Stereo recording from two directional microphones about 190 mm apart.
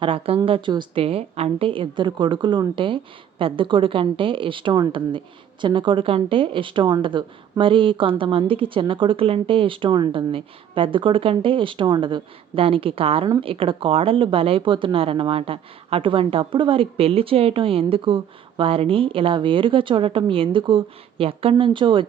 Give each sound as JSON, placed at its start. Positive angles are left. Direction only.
{"t": 0.0, "sound": "a woman's voice", "side_deg": -30}